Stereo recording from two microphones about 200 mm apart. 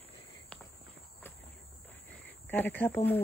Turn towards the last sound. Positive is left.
turn(degrees=10)  # may be behind; listen again after turning